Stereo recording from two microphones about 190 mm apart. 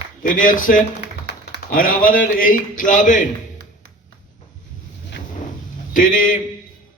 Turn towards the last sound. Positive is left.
turn(degrees=45)  # may be behind; listen again after turning